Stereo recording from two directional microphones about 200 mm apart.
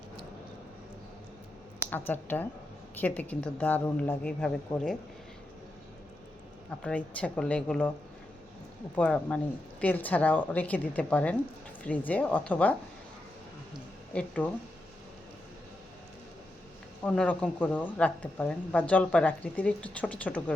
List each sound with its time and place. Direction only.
1.9 s speech: 10° left (ahead or behind)
6.8 s speech: 5° left (ahead or behind)
9.0 s speech: 5° left (ahead or behind)
14.1 s speech: 5° left (ahead or behind)
17.0 s speech: 10° left (ahead or behind)